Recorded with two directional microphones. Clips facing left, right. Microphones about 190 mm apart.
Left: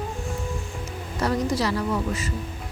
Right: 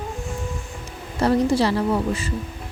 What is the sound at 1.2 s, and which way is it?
Speech, 30° right (ahead or behind).